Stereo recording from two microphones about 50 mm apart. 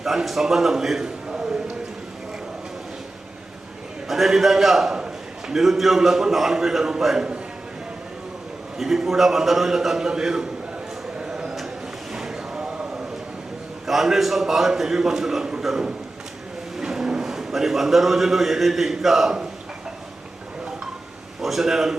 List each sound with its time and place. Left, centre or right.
0.0 s a man's voice: centre
4.1 s a sound: centre
5.5 s a man's voice: centre
8.8 s a man's voice: centre
11.2 s a sound: centre
12.1 s boat: centre
13.8 s a man's voice: centre
21.4 s a man's voice: centre